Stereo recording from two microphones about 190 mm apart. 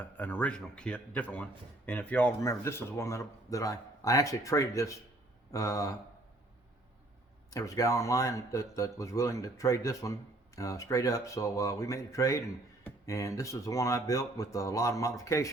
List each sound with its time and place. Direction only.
0.0 s speech: 10° left (ahead or behind)
7.5 s speech: 15° left (ahead or behind)